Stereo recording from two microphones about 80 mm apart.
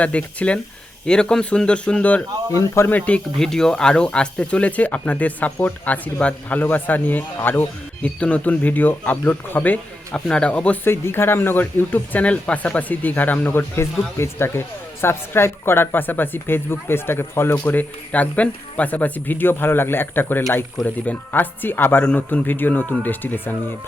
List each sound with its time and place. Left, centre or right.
0.0 s speech: centre
2.5 s speech: left
3.3 s speech: centre
10.8 s speech: left